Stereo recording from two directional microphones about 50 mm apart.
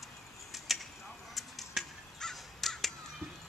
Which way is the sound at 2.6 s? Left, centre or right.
Centre.